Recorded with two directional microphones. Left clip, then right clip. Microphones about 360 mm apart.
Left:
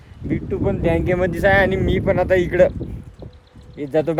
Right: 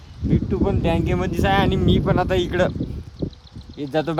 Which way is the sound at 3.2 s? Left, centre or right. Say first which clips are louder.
Right 12 dB; right.